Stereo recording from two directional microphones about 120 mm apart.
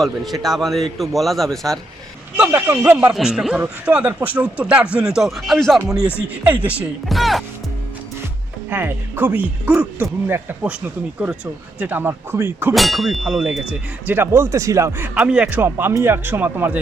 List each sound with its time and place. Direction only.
0.4 s a man's voice: centre (ahead or behind)
2.3 s speech: 10° right (ahead or behind)
5.8 s speech: 25° right (ahead or behind)
7.1 s a man's voice: centre (ahead or behind)
8.7 s speech: 15° right (ahead or behind)
12.7 s a man's voice: centre (ahead or behind)
14.1 s speech: 20° right (ahead or behind)
15.1 s speech: 5° right (ahead or behind)